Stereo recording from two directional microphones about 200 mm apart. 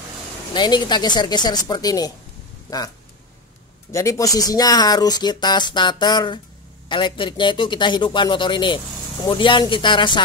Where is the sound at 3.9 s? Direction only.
15° left (ahead or behind).